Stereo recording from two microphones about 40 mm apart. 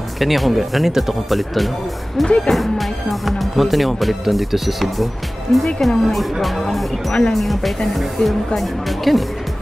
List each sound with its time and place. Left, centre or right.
0.2 s speech: centre
2.2 s speech: left
2.5 s speech: centre